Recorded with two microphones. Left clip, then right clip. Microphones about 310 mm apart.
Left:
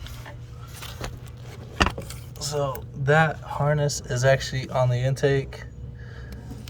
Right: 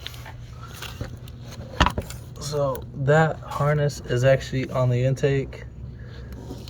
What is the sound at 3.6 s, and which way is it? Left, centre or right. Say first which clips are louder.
Speech: right 1 dB; left.